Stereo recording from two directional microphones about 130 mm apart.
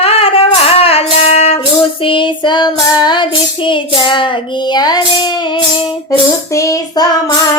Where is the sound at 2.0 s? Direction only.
40° left (ahead or behind).